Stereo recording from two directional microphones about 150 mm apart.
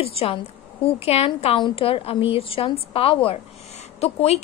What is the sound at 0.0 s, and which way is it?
A woman's voice, 40° left (ahead or behind).